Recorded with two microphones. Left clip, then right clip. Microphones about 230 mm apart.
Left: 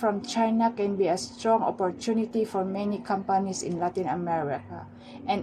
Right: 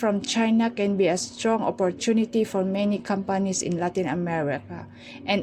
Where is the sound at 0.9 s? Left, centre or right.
Right.